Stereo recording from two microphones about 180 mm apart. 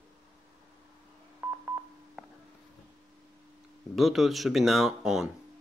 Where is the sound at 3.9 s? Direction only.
Centre (ahead or behind).